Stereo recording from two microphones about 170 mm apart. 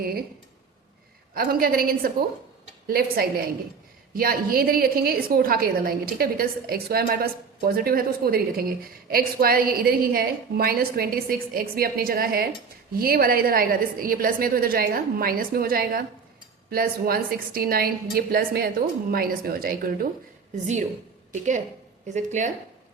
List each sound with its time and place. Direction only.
0.0 s a woman's voice: 65° right (ahead or behind)
1.4 s a woman's voice: 60° right (ahead or behind)
21.3 s speech: 45° right (ahead or behind)